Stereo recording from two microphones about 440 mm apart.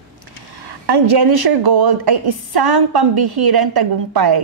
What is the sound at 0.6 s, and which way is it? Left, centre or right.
A woman's voice, right.